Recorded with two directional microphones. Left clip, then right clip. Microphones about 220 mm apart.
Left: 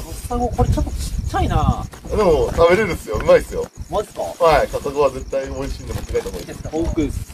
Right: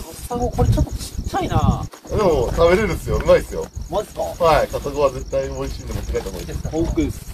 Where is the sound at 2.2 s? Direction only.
50° left (ahead or behind).